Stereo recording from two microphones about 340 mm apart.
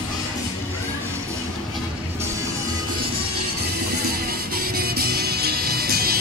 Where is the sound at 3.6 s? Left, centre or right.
Right.